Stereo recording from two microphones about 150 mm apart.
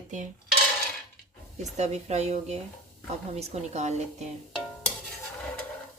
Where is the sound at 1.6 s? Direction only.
50° right (ahead or behind).